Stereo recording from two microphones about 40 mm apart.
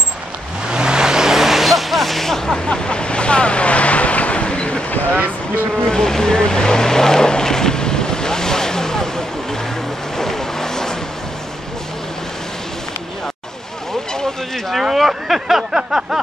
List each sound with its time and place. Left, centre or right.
0.7 s vehicle: right; by 4.8 s left
5.9 s boat: centre
10.1 s vehicle: centre
14.7 s a sound: centre